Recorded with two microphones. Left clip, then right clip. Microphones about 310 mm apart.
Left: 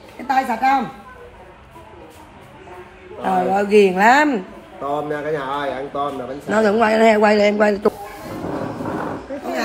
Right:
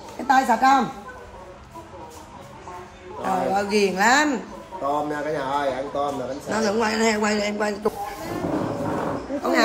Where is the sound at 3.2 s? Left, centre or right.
Centre.